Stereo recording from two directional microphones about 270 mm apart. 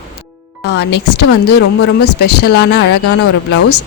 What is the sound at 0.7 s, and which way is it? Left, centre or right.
A man's voice, left.